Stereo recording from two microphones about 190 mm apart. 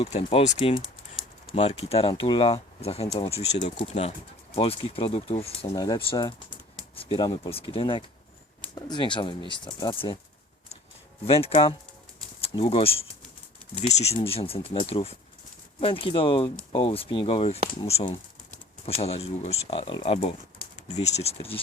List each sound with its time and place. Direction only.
0.0 s speech: 30° left (ahead or behind)
11.3 s speech: 30° left (ahead or behind)